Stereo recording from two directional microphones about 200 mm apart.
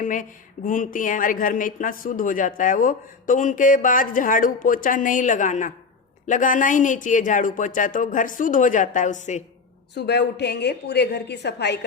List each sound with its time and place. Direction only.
0.0 s speech: 40° left (ahead or behind)
9.9 s a woman's voice: 55° left (ahead or behind)